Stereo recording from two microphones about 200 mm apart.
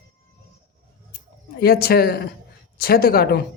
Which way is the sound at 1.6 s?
50° left (ahead or behind).